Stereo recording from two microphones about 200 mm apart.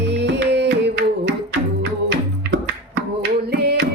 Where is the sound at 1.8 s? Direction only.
70° right (ahead or behind).